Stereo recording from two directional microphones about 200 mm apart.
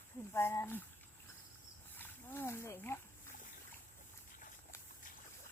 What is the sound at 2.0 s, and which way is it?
Speech, 10° left (ahead or behind).